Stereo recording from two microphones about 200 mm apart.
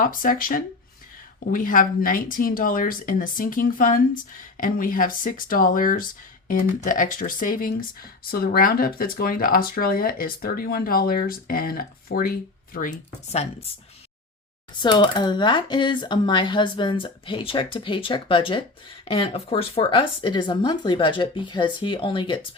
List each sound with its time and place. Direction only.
0.0 s speech: 45° left (ahead or behind)
14.8 s speech: 25° left (ahead or behind)